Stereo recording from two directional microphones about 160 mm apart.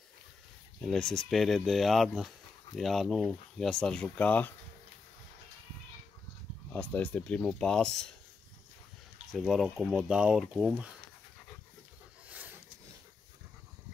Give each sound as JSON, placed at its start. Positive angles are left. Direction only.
{"t": 0.7, "sound": "speech", "side_deg": 5}
{"t": 6.7, "sound": "speech", "side_deg": 10}
{"t": 9.3, "sound": "speech", "side_deg": 0}
{"t": 12.3, "sound": "a sound", "side_deg": -10}